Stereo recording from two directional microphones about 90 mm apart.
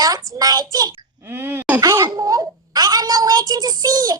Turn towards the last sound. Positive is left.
turn(degrees=-45)  # may be behind; listen again after turning